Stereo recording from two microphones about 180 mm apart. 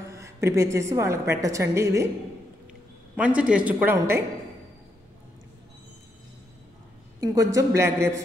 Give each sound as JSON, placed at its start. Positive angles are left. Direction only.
{"t": 0.1, "sound": "a woman's voice", "side_deg": -15}
{"t": 3.2, "sound": "a woman's voice", "side_deg": -5}
{"t": 7.2, "sound": "a woman's voice", "side_deg": -20}